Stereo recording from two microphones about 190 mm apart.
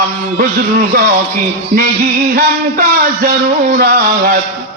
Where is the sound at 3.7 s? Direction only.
50° right (ahead or behind).